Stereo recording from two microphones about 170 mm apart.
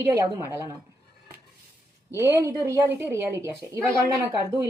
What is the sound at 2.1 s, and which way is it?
Speech, 20° right (ahead or behind).